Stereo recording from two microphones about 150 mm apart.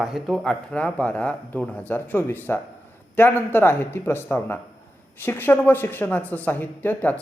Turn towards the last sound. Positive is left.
turn(degrees=10)  # may be behind; listen again after turning